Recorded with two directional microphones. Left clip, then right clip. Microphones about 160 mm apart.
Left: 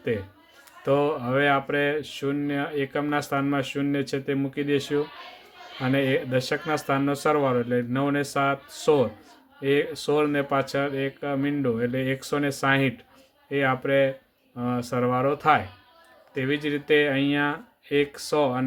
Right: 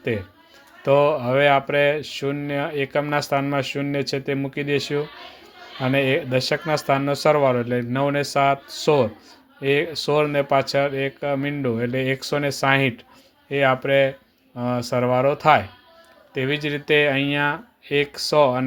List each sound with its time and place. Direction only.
0.8 s speech: 25° right (ahead or behind)